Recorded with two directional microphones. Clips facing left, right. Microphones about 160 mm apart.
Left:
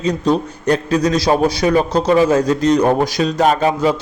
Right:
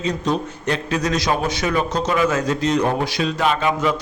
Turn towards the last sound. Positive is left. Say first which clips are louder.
# left 5 dB
turn(degrees=35)  # may be behind; listen again after turning